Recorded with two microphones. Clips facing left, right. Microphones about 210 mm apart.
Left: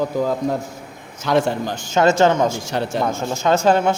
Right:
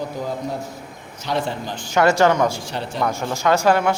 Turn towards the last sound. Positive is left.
turn(degrees=25)  # may be behind; listen again after turning